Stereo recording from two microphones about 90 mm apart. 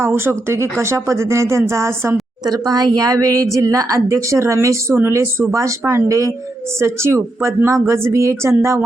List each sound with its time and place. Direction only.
0.0 s a woman's voice: 25° right (ahead or behind)
2.5 s a woman's voice: 45° right (ahead or behind)